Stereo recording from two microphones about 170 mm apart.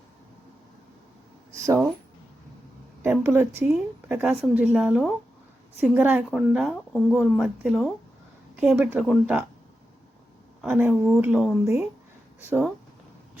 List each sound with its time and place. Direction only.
1.5 s speech: 20° right (ahead or behind)
3.0 s a woman's voice: 15° right (ahead or behind)
10.6 s speech: 10° right (ahead or behind)
11.6 s speech: 15° right (ahead or behind)